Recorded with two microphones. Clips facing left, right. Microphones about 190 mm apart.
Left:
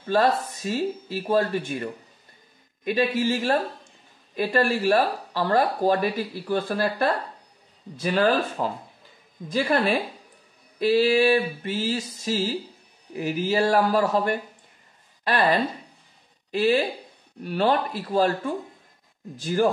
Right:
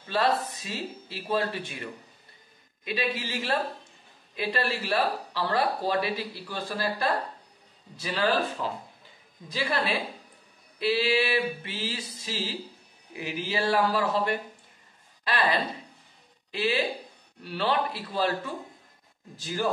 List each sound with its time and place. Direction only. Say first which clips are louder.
0.1 s speech: left 5 dB; 45° left (ahead or behind)
19.3 s speech: left 8 dB; 50° left (ahead or behind)